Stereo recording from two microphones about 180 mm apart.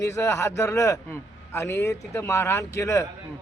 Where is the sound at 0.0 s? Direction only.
15° left (ahead or behind).